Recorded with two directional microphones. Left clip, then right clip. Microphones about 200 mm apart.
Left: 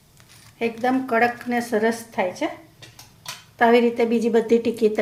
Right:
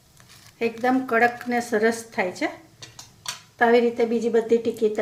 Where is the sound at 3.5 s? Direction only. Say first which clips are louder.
Left 2 dB; 10° left (ahead or behind).